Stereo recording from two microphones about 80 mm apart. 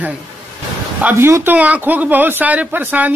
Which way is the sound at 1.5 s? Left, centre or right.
Centre.